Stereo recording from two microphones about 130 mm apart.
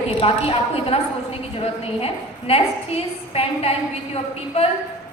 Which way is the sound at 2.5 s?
50° left (ahead or behind).